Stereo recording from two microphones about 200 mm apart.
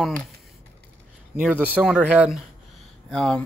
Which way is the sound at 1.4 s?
5° right (ahead or behind).